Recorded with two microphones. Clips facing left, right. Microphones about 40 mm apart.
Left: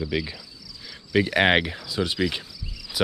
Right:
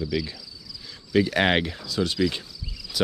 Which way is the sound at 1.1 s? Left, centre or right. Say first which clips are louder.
Left 1 dB; centre.